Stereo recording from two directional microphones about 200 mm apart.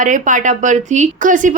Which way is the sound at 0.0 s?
40° right (ahead or behind).